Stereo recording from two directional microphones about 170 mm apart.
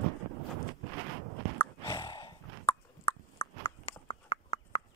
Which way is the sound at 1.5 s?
20° left (ahead or behind).